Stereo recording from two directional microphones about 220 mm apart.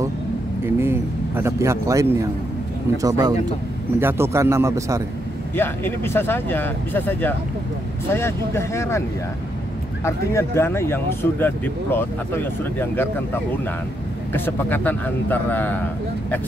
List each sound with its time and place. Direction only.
0.7 s a man's voice: 10° right (ahead or behind)
5.6 s speech: 10° left (ahead or behind)
10.0 s speech: 10° left (ahead or behind)